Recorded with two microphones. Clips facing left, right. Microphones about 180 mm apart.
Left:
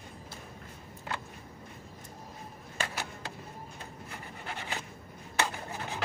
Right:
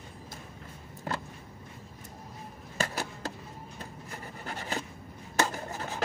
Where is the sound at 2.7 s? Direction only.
40° right (ahead or behind).